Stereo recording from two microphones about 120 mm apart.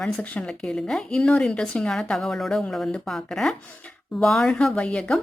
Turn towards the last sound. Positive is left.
turn(degrees=5)  # may be behind; listen again after turning